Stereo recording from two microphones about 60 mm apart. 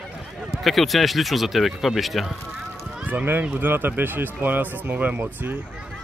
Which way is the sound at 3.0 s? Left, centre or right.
Right.